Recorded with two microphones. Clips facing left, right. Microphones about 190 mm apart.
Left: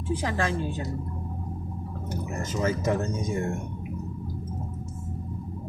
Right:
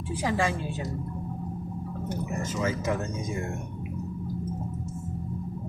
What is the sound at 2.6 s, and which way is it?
Speech, 35° left (ahead or behind).